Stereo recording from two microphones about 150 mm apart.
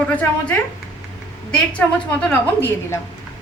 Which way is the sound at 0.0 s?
10° left (ahead or behind).